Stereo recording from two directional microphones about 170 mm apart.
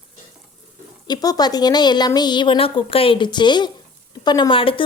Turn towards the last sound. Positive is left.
turn(degrees=30)  # may be behind; listen again after turning